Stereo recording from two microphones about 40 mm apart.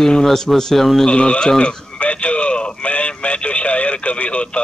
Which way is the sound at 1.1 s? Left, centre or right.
Left.